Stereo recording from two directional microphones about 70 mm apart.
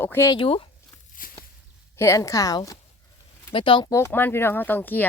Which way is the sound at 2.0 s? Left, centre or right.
Left.